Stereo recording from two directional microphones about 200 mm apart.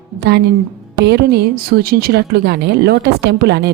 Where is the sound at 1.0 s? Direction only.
55° right (ahead or behind).